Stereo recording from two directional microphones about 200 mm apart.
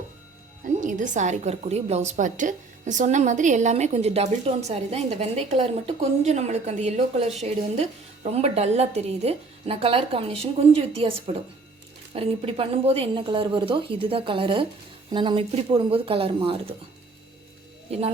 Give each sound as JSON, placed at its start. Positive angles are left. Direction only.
{"t": 0.6, "sound": "a woman's voice", "side_deg": -40}